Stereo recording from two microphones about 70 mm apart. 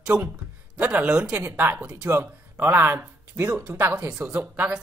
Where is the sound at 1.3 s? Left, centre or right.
Right; by 2.1 s centre.